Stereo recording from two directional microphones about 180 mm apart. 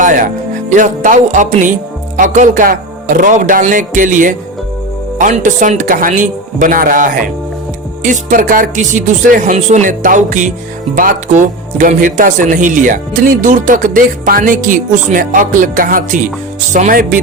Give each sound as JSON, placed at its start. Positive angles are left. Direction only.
{"t": 0.0, "sound": "speech", "side_deg": -45}